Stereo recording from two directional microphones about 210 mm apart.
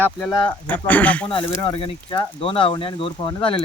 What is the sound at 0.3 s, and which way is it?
Speech, 20° left (ahead or behind).